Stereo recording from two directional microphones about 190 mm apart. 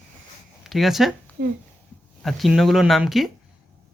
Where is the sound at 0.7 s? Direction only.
Centre (ahead or behind).